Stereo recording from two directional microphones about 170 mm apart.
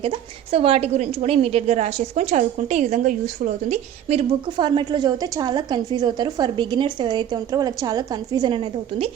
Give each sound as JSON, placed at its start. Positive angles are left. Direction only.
{"t": 0.5, "sound": "a woman's voice", "side_deg": -35}